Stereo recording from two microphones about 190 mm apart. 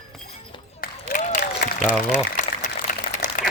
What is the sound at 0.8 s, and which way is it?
Applause, 45° left (ahead or behind).